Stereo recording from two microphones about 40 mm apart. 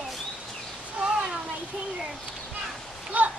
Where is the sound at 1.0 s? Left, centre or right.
Right.